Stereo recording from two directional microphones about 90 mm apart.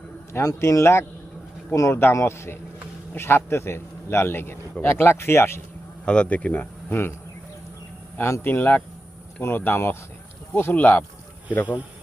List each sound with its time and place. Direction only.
0.3 s a man's voice: 35° left (ahead or behind)
6.1 s speech: 15° left (ahead or behind)
8.2 s a man's voice: 30° left (ahead or behind)
11.6 s a man's voice: 15° right (ahead or behind)